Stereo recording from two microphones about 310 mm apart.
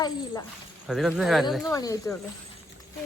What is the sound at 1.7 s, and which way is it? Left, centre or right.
Speech, centre.